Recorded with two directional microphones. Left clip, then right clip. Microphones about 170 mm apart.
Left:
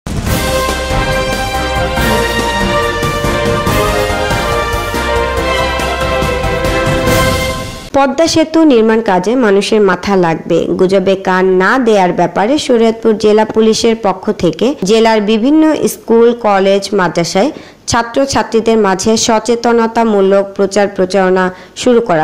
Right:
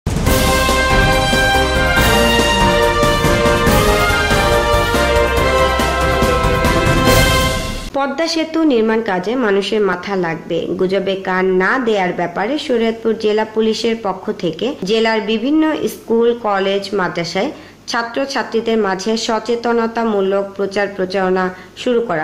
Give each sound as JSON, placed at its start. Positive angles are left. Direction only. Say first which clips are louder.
{"t": 7.9, "sound": "a woman's voice", "louder": "left 8 dB", "side_deg": 45}